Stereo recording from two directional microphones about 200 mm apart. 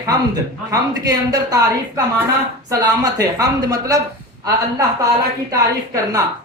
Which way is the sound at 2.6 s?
20° right (ahead or behind).